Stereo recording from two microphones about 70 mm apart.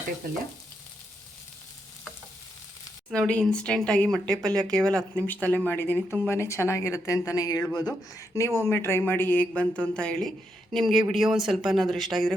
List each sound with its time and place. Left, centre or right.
3.1 s speech: centre
5.2 s speech: left
8.4 s speech: left
9.6 s speech: centre